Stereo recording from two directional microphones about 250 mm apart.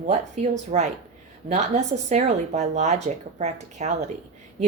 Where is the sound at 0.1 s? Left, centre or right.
Right.